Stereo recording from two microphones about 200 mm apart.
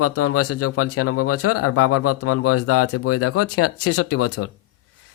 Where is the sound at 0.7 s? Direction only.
90° left.